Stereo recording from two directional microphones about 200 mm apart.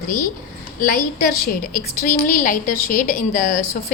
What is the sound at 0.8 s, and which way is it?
A woman's voice, 45° left (ahead or behind).